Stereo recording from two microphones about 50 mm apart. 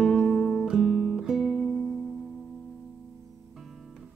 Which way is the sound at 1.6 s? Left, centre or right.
Centre.